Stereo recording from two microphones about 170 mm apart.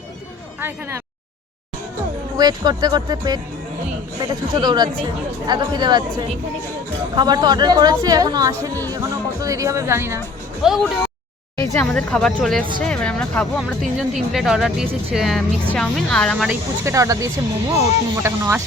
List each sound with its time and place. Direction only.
0.6 s speech: 15° right (ahead or behind)
2.3 s a woman's voice: 25° right (ahead or behind)
10.6 s speech: centre (ahead or behind)
11.5 s speech: 20° left (ahead or behind)
11.9 s speech: 5° left (ahead or behind)
16.5 s speech: 15° right (ahead or behind)